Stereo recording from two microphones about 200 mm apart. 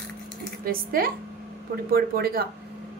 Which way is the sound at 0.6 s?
45° right (ahead or behind).